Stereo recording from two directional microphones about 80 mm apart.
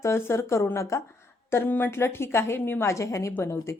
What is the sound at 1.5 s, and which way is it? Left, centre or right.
Speech, left.